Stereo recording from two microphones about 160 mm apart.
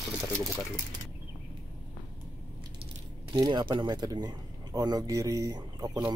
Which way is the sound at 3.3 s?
30° right (ahead or behind).